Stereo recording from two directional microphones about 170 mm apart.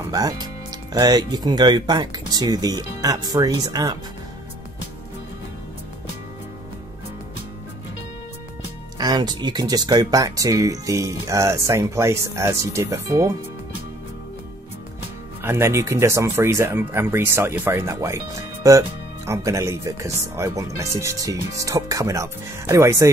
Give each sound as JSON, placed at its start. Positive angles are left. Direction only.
{"t": 0.0, "sound": "speech", "side_deg": -20}
{"t": 8.9, "sound": "speech", "side_deg": -25}
{"t": 15.4, "sound": "speech", "side_deg": -15}